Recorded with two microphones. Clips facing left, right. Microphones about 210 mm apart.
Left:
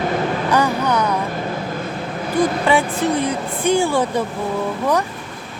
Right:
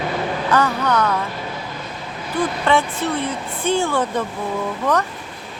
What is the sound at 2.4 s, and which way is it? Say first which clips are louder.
Speech: left 2 dB; 10° left (ahead or behind).